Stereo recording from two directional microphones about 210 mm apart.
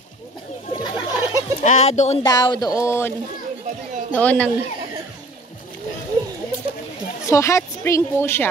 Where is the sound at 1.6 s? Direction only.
30° left (ahead or behind).